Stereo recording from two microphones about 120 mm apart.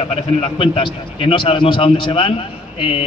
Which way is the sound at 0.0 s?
50° left (ahead or behind).